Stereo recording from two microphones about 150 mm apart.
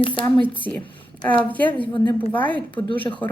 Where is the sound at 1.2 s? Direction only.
10° left (ahead or behind).